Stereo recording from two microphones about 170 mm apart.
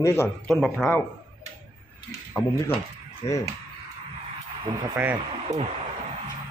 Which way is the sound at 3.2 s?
35° left (ahead or behind).